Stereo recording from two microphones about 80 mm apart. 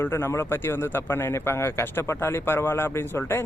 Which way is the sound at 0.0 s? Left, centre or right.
Left.